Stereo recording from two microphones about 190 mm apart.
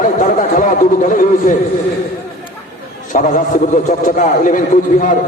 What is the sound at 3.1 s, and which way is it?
A man's voice, 45° left (ahead or behind).